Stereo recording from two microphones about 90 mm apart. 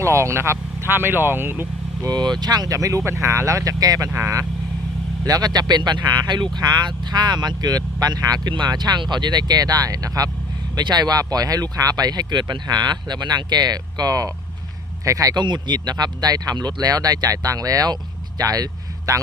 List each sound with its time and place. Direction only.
0.0 s speech: 30° right (ahead or behind)
2.0 s speech: 55° right (ahead or behind)
4.1 s speech: 30° right (ahead or behind)
5.2 s speech: 45° right (ahead or behind)
15.4 s speech: 55° right (ahead or behind); by 19.2 s 40° right (ahead or behind)